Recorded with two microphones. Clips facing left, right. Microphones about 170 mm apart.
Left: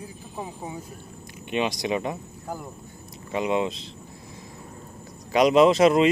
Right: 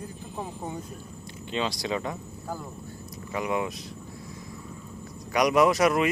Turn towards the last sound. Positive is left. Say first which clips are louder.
# left 4 dB
turn(degrees=25)  # may be behind; listen again after turning